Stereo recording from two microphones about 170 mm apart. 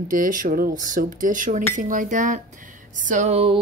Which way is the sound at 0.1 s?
55° right (ahead or behind).